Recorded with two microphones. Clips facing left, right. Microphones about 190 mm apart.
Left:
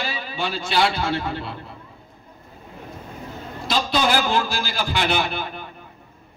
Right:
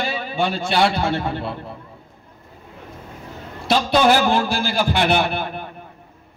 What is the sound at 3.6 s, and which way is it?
A man's voice, 60° right (ahead or behind).